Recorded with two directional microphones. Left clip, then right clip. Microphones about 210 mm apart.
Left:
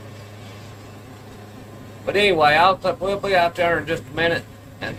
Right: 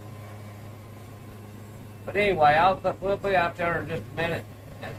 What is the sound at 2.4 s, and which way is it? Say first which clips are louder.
Speech: left 2 dB; 45° left (ahead or behind).